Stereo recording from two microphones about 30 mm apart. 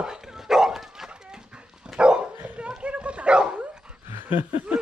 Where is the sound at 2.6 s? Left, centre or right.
Right.